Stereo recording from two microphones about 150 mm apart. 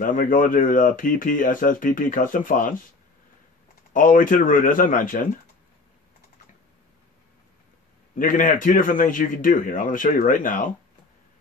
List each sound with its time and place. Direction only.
0.0 s speech: 65° left (ahead or behind)
3.9 s speech: 65° left (ahead or behind)
8.2 s speech: 60° left (ahead or behind)